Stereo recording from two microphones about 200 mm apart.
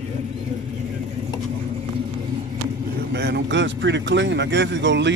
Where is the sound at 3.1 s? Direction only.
60° right (ahead or behind).